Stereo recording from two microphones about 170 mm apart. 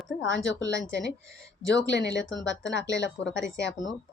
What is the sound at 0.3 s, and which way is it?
Speech, 90° left.